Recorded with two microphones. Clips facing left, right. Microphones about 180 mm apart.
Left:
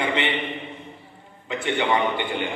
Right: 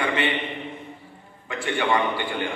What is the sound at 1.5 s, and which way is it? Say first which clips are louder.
A man's voice: left 1 dB; 20° left (ahead or behind).